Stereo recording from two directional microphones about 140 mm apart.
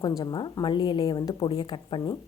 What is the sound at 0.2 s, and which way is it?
Speech, 30° left (ahead or behind).